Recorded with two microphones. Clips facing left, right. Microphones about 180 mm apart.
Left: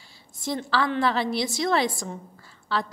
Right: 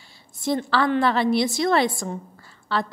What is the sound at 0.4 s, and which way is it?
A woman's voice, 60° right (ahead or behind).